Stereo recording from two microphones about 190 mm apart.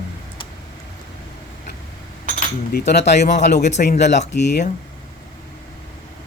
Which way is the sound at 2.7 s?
60° left (ahead or behind).